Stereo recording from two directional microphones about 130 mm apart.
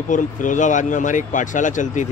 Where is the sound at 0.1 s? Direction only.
80° left.